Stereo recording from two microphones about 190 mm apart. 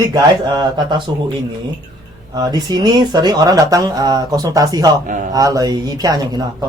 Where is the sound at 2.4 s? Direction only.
20° right (ahead or behind).